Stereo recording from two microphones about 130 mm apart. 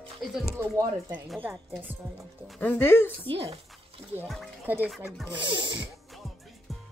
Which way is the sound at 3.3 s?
50° right (ahead or behind).